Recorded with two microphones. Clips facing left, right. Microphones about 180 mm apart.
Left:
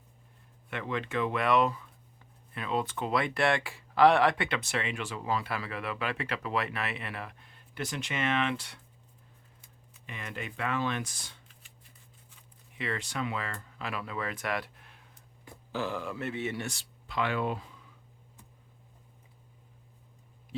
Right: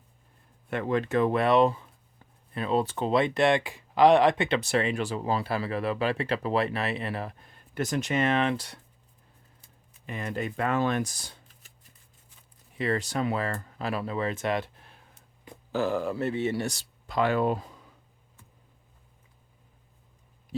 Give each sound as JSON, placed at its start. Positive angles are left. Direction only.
{"t": 0.7, "sound": "speech", "side_deg": -40}
{"t": 10.1, "sound": "speech", "side_deg": -40}
{"t": 12.7, "sound": "speech", "side_deg": -40}
{"t": 15.7, "sound": "speech", "side_deg": -45}